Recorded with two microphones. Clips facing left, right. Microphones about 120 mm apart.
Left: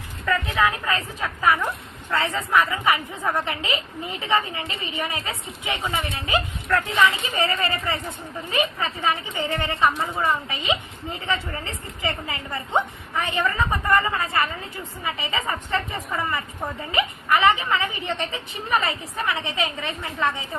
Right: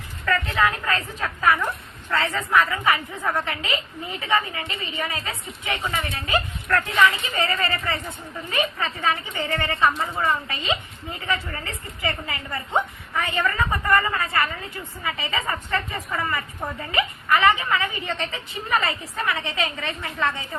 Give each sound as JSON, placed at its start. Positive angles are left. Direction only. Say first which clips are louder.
{"t": 0.3, "sound": "a woman's voice", "louder": "even", "side_deg": 10}
{"t": 6.7, "sound": "speech", "louder": "even", "side_deg": 5}
{"t": 7.3, "sound": "a woman's voice", "louder": "left 1 dB", "side_deg": 15}